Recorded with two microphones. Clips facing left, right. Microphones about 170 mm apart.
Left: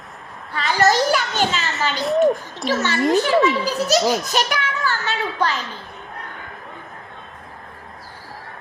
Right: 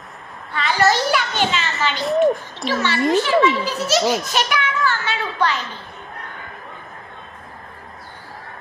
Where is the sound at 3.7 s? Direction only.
40° left (ahead or behind).